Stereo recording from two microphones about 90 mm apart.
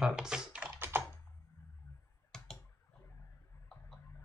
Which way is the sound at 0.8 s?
25° right (ahead or behind).